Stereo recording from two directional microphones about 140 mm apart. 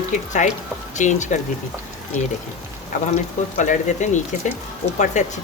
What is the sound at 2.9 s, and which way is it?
Speech, 60° left (ahead or behind).